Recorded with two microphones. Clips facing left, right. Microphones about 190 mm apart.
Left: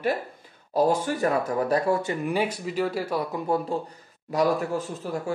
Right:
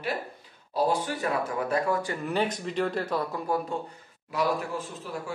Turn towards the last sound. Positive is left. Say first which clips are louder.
# left 6 dB
turn(degrees=45)  # may be behind; listen again after turning